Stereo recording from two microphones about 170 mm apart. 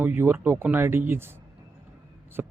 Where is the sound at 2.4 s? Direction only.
10° right (ahead or behind).